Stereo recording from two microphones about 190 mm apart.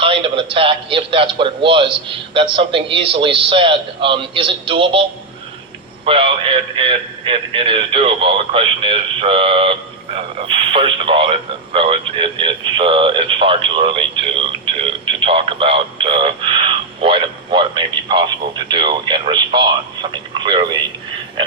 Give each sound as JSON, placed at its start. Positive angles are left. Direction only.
{"t": 0.0, "sound": "speech", "side_deg": -30}
{"t": 6.1, "sound": "speech", "side_deg": -30}